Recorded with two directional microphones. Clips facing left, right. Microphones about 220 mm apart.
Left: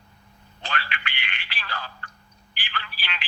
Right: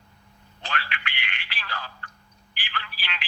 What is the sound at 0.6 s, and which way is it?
Telephone, 30° left (ahead or behind).